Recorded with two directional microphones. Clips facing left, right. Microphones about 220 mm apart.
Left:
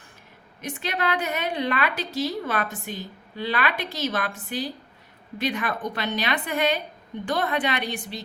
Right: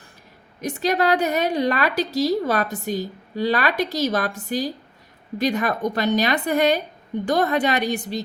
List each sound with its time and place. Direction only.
0.6 s a woman's voice: 40° right (ahead or behind)